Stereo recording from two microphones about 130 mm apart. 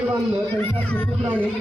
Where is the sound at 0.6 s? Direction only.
10° left (ahead or behind).